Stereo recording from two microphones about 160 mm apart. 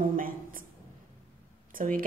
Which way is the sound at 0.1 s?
60° right (ahead or behind).